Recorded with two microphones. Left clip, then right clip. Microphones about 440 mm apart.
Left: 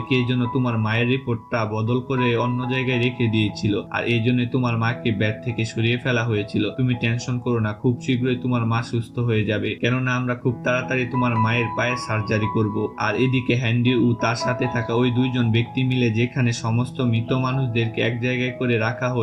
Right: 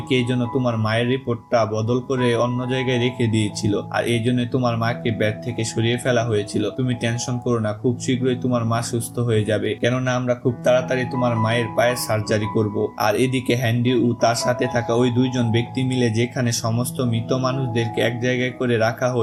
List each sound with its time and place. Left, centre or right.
0.1 s speech: centre